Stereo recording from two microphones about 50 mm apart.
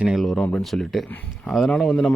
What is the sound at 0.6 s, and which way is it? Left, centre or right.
Speech, centre.